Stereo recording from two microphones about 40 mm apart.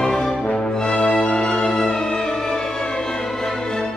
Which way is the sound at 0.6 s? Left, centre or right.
Left.